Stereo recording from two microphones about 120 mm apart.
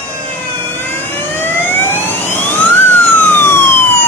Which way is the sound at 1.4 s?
15° left (ahead or behind).